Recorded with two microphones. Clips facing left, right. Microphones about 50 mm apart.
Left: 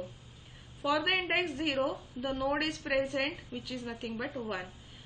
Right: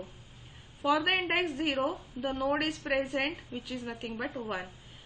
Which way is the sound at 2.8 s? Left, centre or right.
Centre.